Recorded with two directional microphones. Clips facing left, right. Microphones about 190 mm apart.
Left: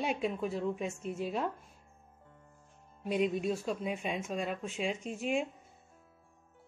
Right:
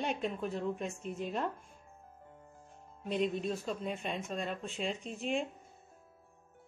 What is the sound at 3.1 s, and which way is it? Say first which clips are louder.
A woman's voice: left 2 dB; 10° left (ahead or behind).